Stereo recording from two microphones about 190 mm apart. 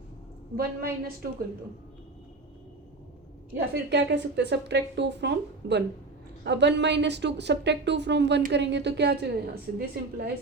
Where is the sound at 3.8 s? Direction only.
65° right (ahead or behind).